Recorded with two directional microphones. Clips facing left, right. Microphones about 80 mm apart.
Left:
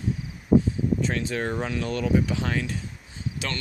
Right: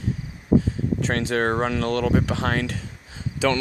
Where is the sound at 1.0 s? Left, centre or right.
Right.